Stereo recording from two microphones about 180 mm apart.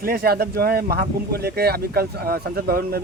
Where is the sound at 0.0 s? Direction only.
55° right (ahead or behind).